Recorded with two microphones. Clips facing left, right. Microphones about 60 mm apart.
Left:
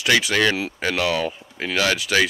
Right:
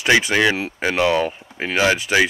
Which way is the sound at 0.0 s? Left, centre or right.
Right.